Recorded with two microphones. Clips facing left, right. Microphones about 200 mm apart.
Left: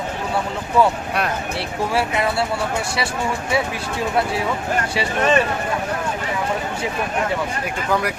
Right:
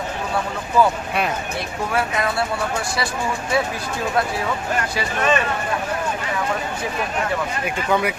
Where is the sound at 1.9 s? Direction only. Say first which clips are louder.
Left 1 dB; 30° left (ahead or behind).